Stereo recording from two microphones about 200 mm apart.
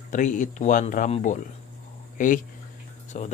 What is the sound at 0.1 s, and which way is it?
Speech, 40° left (ahead or behind).